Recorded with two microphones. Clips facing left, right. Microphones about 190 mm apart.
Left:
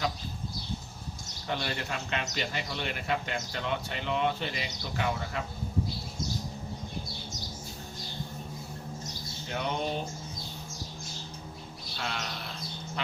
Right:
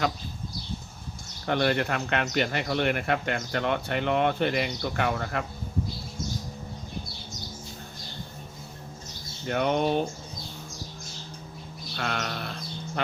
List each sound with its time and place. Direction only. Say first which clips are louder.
1.5 s speech: right 9 dB; 60° right (ahead or behind)
9.5 s speech: right 8 dB; 60° right (ahead or behind)
11.9 s sheep: right 6 dB; 60° right (ahead or behind)